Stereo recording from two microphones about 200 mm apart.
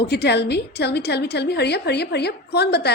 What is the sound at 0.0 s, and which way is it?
A woman's voice, 55° left (ahead or behind).